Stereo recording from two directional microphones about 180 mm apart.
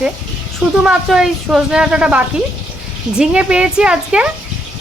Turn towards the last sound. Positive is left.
turn(degrees=-5)  # may be behind; listen again after turning